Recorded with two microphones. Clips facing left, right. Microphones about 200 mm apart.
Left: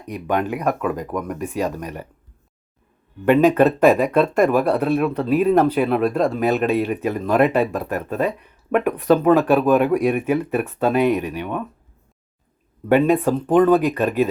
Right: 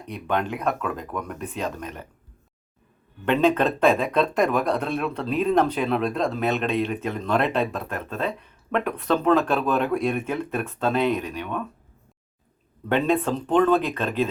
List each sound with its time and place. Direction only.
0.0 s speech: 10° left (ahead or behind)
3.2 s speech: 10° left (ahead or behind)
12.9 s speech: 10° left (ahead or behind)